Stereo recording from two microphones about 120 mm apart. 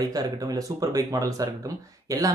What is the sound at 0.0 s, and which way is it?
Speech, 30° right (ahead or behind).